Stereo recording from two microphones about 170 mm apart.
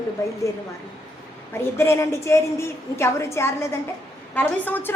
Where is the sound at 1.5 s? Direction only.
15° left (ahead or behind).